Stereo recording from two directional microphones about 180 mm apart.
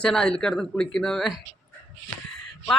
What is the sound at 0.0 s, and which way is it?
Speech, 5° left (ahead or behind).